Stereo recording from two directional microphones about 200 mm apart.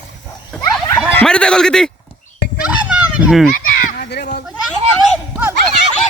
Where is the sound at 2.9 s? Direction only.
5° right (ahead or behind).